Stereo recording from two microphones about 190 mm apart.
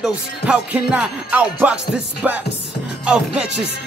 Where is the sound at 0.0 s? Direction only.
5° right (ahead or behind).